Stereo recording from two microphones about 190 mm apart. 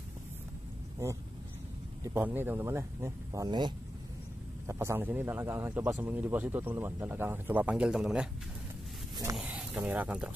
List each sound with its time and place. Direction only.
2.0 s speech: 10° right (ahead or behind)
9.1 s speech: 20° right (ahead or behind)
9.4 s a sound: 5° right (ahead or behind)